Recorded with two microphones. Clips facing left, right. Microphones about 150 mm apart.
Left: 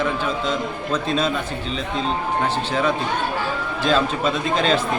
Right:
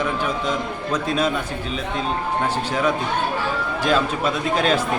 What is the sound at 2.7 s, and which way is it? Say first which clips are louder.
A man's voice: even; 10° right (ahead or behind).